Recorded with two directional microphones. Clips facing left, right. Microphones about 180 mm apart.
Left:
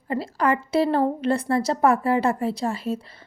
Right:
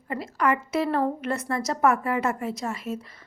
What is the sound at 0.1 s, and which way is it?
A woman's voice, 30° left (ahead or behind).